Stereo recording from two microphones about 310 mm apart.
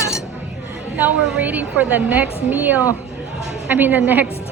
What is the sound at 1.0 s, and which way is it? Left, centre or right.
A woman's voice, centre.